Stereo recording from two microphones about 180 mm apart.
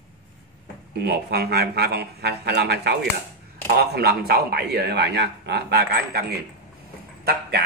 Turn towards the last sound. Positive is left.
turn(degrees=-65)  # may be behind; listen again after turning